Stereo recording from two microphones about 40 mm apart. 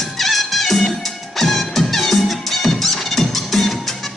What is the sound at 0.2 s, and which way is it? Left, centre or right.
Music, centre.